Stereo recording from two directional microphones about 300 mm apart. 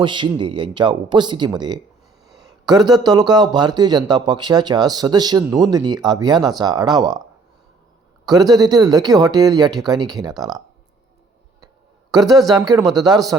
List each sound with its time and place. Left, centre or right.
0.0 s speech: centre
8.3 s speech: centre
12.5 s speech: centre